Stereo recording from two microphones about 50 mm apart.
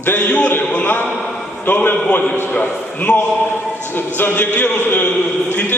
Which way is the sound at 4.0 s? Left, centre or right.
Left.